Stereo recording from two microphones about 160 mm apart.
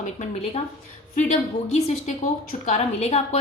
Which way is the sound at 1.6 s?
45° left (ahead or behind).